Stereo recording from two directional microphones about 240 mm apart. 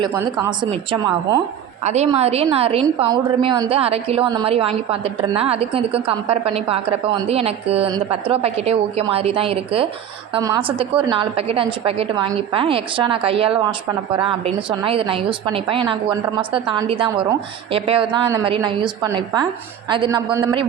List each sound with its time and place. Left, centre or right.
0.0 s a man's voice: centre